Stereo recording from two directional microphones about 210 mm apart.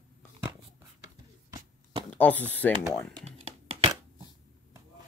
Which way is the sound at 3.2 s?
30° right (ahead or behind).